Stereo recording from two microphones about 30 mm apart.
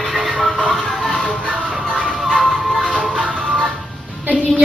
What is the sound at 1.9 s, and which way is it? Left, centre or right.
Music, right.